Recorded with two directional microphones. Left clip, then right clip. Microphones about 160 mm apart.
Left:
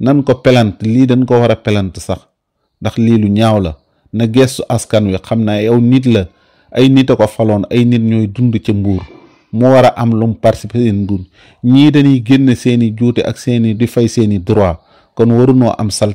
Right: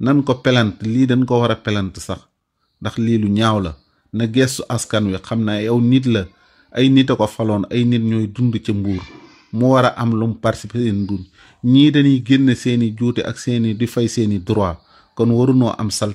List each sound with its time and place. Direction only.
0.0 s speech: 30° left (ahead or behind)
8.7 s speech: 20° left (ahead or behind)
9.6 s speech: 30° left (ahead or behind)